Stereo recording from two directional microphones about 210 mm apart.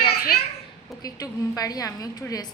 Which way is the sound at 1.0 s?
15° left (ahead or behind).